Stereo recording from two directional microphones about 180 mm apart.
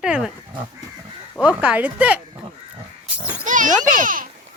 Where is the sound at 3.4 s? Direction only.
45° right (ahead or behind).